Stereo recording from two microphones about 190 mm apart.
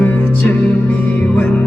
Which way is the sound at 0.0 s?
10° left (ahead or behind).